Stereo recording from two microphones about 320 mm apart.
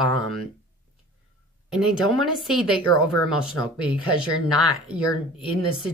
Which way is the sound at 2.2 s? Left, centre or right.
Centre.